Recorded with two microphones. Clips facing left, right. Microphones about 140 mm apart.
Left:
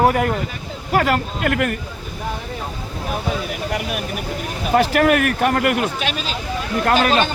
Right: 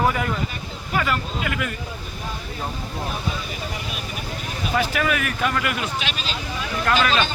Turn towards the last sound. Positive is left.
turn(degrees=50)  # may be behind; listen again after turning